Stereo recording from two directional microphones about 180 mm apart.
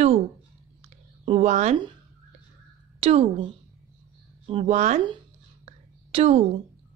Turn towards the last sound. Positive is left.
turn(degrees=-35)  # may be behind; listen again after turning